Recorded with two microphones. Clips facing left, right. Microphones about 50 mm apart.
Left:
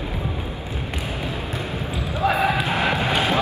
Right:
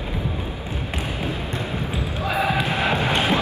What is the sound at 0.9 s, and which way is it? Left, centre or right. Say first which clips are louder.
Basketball bounce: right 2 dB; right.